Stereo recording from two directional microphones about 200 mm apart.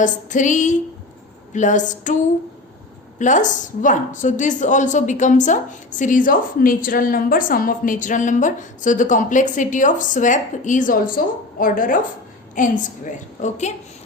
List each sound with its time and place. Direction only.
0.0 s a woman's voice: 40° left (ahead or behind)
3.2 s a woman's voice: 40° left (ahead or behind)